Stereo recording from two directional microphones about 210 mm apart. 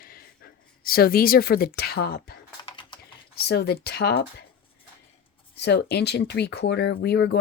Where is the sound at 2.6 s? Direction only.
25° left (ahead or behind).